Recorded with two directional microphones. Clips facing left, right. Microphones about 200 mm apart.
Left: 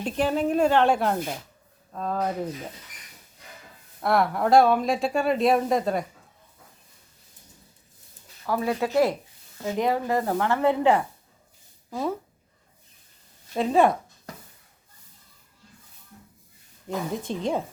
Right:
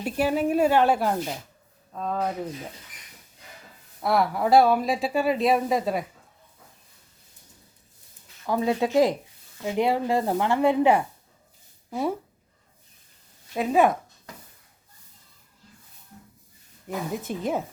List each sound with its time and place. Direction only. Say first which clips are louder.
0.0 s speech: even; 10° right (ahead or behind)
4.0 s speech: even; centre (ahead or behind)
8.4 s speech: right 2 dB; 20° right (ahead or behind)
13.5 s speech: even; 5° right (ahead or behind)
17.2 s speech: even; 5° right (ahead or behind)